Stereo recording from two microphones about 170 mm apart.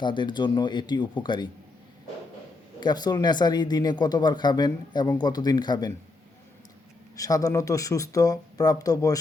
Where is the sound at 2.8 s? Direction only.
25° left (ahead or behind).